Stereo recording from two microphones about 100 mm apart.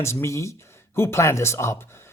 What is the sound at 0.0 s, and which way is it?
Speech, 25° left (ahead or behind).